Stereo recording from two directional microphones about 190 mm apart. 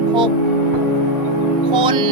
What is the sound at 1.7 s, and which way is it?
Music, 25° right (ahead or behind).